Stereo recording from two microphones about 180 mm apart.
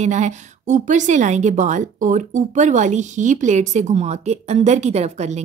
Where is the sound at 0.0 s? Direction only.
40° right (ahead or behind).